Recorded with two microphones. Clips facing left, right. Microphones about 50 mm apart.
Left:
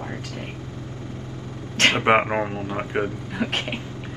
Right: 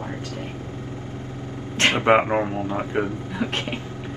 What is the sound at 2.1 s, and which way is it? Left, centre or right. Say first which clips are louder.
Speech: right 1 dB; centre.